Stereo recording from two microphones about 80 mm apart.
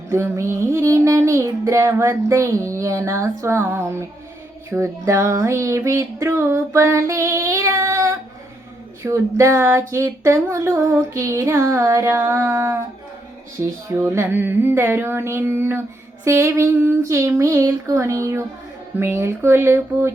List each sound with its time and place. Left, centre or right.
0.1 s music: right
13.6 s a sound: right
16.2 s music: right